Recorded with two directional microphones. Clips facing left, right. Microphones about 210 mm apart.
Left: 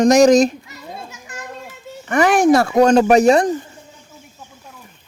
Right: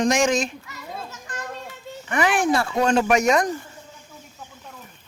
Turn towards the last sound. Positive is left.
turn(degrees=30)  # may be behind; listen again after turning